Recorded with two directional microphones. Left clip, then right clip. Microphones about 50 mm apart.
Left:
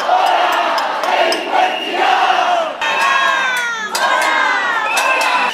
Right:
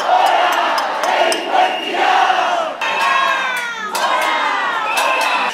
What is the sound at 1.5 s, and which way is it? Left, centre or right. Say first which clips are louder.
Crowd: even; centre.